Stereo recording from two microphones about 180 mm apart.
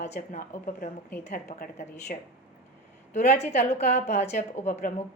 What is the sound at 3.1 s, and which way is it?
A woman's voice, 40° left (ahead or behind).